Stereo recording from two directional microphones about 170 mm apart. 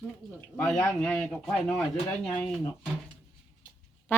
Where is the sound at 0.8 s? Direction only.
10° left (ahead or behind).